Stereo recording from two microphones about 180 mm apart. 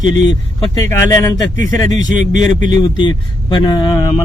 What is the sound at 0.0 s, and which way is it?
Speech, 90° left.